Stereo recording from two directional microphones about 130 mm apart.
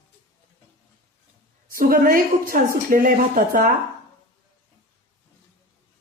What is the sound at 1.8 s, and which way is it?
Speech, 90° right.